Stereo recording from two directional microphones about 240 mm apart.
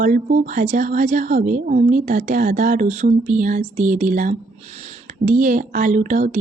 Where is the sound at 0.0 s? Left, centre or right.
Right.